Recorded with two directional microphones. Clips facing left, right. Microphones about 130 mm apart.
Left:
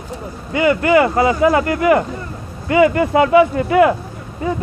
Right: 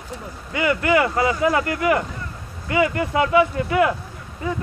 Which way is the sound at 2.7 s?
45° left (ahead or behind).